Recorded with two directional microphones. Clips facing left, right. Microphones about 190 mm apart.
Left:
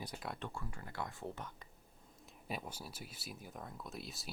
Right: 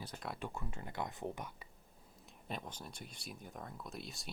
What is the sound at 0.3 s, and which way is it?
Speech, 15° right (ahead or behind).